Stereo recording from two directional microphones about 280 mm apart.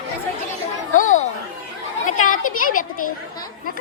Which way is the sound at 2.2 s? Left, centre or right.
Left.